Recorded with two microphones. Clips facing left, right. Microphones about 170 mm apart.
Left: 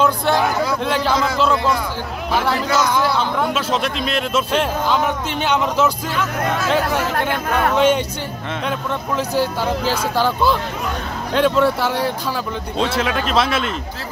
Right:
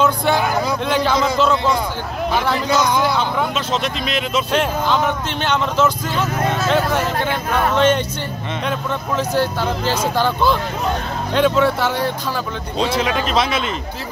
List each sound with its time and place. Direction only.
0.0 s speech: centre (ahead or behind)
2.7 s a man's voice: 20° right (ahead or behind)
3.2 s speech: 5° left (ahead or behind)